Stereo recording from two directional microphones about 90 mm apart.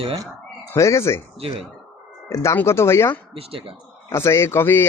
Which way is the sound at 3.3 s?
90° right.